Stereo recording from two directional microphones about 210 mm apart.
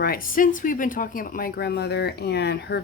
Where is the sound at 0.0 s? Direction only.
45° left (ahead or behind).